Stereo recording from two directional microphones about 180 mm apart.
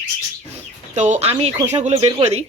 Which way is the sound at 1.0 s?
40° right (ahead or behind).